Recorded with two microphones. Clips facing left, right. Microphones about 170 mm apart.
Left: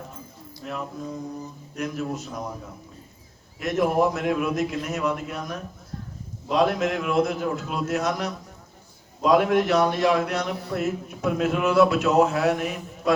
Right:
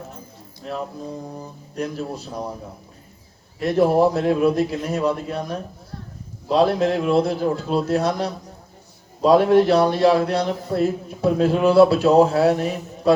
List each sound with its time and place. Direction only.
0.6 s a man's voice: 30° right (ahead or behind)
3.6 s a man's voice: 30° right (ahead or behind)